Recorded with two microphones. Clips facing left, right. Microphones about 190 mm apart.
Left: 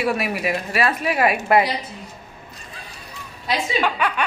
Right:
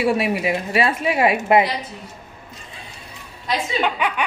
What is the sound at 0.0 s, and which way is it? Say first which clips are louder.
A woman's voice: right 3 dB; 25° right (ahead or behind).